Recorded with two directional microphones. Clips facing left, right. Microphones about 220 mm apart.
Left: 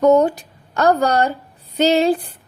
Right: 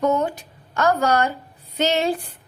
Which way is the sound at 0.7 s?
35° left (ahead or behind).